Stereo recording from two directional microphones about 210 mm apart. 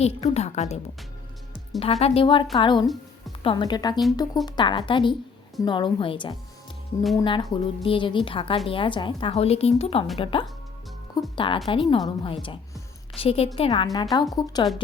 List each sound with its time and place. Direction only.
0.0 s a woman's voice: 30° left (ahead or behind)
1.8 s a woman's voice: 30° left (ahead or behind)
2.8 s music: centre (ahead or behind)
3.4 s a woman's voice: 20° left (ahead or behind)